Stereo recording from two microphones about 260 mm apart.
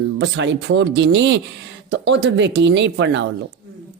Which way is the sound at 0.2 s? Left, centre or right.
Right.